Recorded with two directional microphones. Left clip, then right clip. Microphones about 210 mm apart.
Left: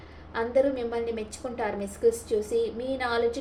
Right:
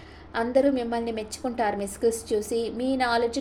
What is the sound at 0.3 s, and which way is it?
A woman's voice, 50° right (ahead or behind).